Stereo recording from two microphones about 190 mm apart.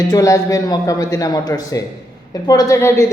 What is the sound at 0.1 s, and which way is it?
A man's voice, 15° left (ahead or behind).